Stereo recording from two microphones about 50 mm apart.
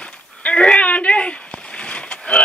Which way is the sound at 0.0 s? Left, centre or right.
Left.